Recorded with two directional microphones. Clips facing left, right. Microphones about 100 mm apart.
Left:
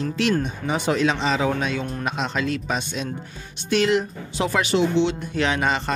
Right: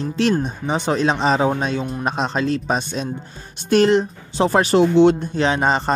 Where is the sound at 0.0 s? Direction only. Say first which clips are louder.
Right 3 dB; 30° right (ahead or behind).